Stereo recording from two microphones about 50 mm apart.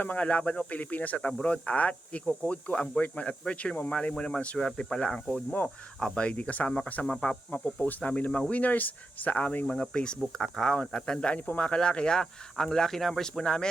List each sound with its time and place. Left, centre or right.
0.0 s speech: left; by 6.2 s centre
6.2 s speech: left
7.5 s speech: left; by 13.7 s centre